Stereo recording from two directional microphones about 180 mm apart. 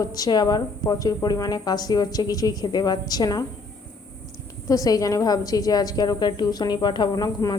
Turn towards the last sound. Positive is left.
turn(degrees=20)  # may be behind; listen again after turning